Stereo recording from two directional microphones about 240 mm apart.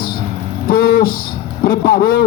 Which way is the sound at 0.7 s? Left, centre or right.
Left.